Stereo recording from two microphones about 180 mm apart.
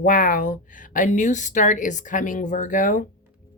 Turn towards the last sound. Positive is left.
turn(degrees=50)  # may be behind; listen again after turning